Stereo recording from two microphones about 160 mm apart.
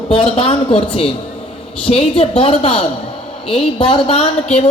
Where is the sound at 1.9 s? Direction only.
35° left (ahead or behind).